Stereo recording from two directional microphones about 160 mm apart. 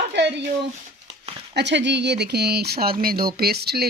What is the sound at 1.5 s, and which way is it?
Speech, 90° right.